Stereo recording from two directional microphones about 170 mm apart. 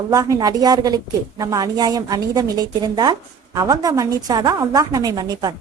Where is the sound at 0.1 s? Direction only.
20° right (ahead or behind).